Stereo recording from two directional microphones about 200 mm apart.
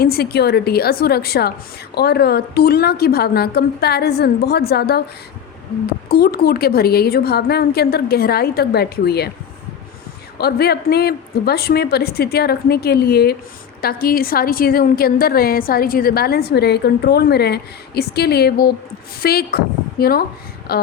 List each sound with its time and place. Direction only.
0.0 s a woman's voice: 50° left (ahead or behind)
6.1 s a woman's voice: 50° left (ahead or behind)
10.3 s a woman's voice: 55° left (ahead or behind)